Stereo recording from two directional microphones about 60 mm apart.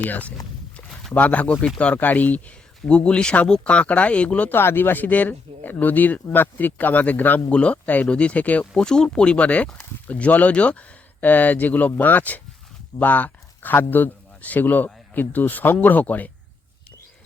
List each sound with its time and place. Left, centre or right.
0.0 s speech: left
4.4 s a man's voice: left